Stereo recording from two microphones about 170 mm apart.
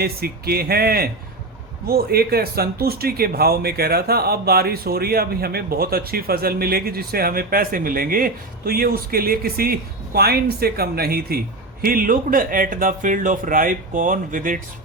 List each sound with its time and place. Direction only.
0.0 s speech: 65° right (ahead or behind)